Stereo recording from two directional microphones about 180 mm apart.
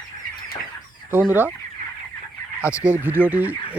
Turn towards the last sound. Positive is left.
turn(degrees=-10)  # may be behind; listen again after turning